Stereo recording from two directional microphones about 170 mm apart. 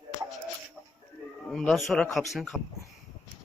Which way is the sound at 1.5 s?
Centre (ahead or behind).